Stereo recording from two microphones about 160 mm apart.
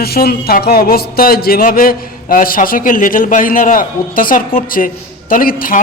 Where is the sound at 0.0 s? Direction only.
75° left (ahead or behind).